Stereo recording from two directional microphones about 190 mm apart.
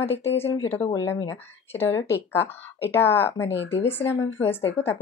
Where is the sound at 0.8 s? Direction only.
15° left (ahead or behind).